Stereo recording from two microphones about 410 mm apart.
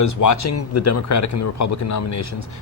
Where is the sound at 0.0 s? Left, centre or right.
Left.